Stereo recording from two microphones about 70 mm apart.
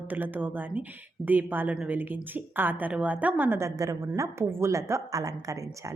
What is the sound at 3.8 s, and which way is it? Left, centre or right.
A woman's voice, right.